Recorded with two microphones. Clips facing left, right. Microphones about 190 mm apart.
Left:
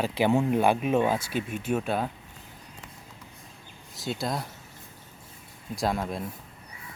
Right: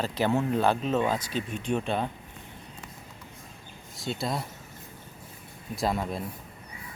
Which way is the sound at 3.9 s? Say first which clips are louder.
Even; centre (ahead or behind).